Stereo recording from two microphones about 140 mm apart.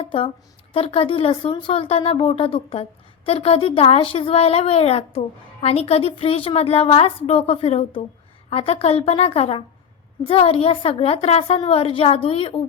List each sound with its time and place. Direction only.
0.0 s a woman's voice: 40° left (ahead or behind)